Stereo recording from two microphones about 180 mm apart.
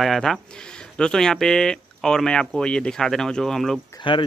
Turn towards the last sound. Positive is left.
turn(degrees=30)  # may be behind; listen again after turning